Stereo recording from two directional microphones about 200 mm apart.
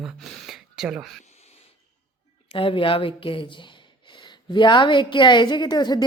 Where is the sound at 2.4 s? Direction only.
25° left (ahead or behind).